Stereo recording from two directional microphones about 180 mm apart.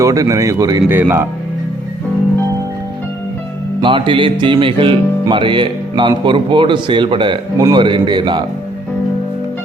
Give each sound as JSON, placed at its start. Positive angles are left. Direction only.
{"t": 0.0, "sound": "speech", "side_deg": -20}
{"t": 3.8, "sound": "speech", "side_deg": -25}